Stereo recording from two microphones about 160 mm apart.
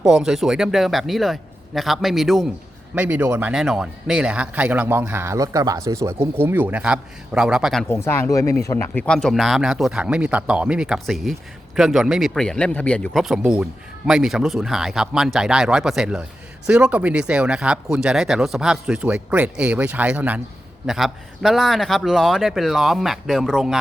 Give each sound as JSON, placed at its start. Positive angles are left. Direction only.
{"t": 0.0, "sound": "a man's voice", "side_deg": -5}
{"t": 7.9, "sound": "a man's voice", "side_deg": 15}